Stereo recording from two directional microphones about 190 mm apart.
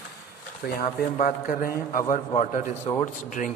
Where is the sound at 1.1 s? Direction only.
45° left (ahead or behind).